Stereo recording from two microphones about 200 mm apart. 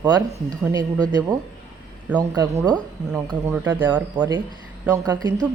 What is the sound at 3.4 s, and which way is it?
Speech, 10° right (ahead or behind).